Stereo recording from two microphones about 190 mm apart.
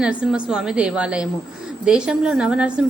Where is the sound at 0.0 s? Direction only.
5° right (ahead or behind).